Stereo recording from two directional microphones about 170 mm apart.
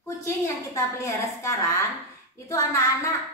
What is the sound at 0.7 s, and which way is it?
Speech, 20° left (ahead or behind).